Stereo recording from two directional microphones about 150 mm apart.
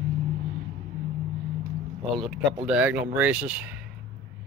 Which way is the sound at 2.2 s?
40° right (ahead or behind).